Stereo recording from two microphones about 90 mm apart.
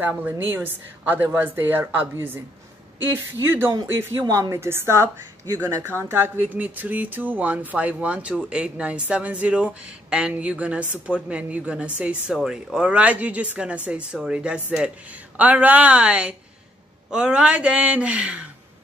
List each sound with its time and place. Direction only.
0.0 s a woman's voice: 20° right (ahead or behind)
4.3 s a woman's voice: 35° right (ahead or behind); by 12.4 s 15° right (ahead or behind)
12.4 s speech: 5° right (ahead or behind)